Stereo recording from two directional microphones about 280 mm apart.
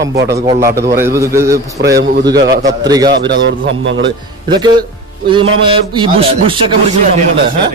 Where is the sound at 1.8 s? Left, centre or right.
Right.